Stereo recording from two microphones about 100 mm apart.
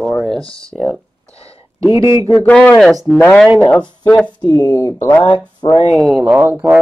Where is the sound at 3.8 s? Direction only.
50° left (ahead or behind).